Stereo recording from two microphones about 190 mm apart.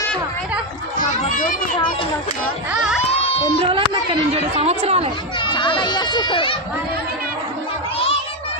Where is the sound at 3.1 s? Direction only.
30° left (ahead or behind).